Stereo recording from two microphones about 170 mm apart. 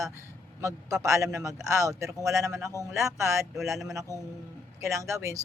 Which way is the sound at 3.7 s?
Centre (ahead or behind).